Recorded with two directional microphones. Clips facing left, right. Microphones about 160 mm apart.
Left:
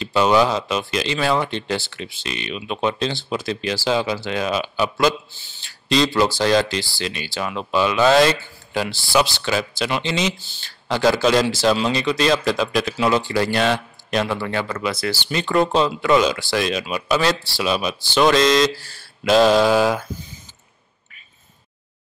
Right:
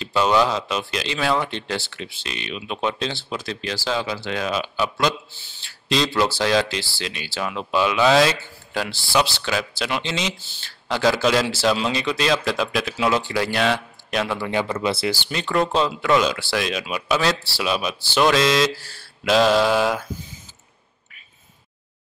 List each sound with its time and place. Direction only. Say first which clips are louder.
0.0 s speech: left 2 dB; centre (ahead or behind)
14.5 s speech: right 1 dB; 15° right (ahead or behind)
15.2 s speech: left 5 dB; centre (ahead or behind)